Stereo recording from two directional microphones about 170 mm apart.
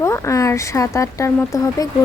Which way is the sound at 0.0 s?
15° left (ahead or behind).